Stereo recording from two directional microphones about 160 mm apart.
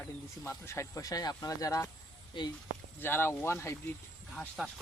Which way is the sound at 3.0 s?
15° left (ahead or behind).